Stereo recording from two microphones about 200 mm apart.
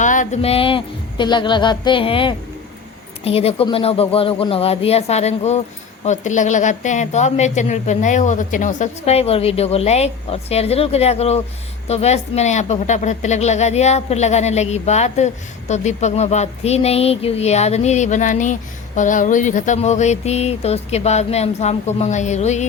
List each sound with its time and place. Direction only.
0.0 s a woman's voice: 40° left (ahead or behind)